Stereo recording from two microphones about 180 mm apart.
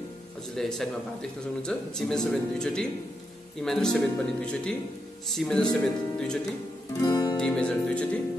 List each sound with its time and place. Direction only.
0.6 s speech: centre (ahead or behind)
7.0 s music: 20° left (ahead or behind)
7.3 s speech: 5° left (ahead or behind)